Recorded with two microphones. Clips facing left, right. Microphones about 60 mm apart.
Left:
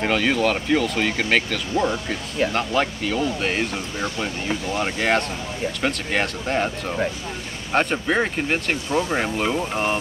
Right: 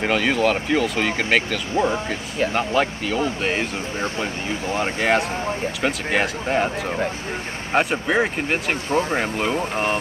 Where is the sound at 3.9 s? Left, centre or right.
Right.